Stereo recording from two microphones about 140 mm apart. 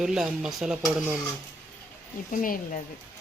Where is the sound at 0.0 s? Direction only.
5° right (ahead or behind).